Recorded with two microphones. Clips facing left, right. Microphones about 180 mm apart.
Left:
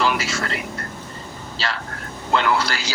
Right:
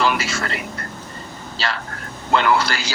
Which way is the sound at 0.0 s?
60° right (ahead or behind).